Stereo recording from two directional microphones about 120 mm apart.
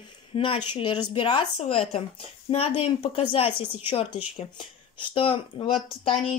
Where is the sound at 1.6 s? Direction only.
55° left (ahead or behind).